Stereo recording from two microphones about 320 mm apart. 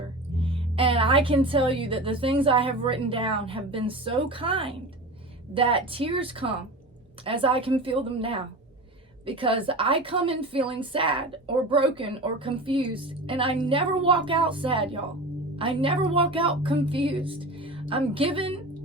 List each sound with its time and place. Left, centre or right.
0.3 s a woman's voice: centre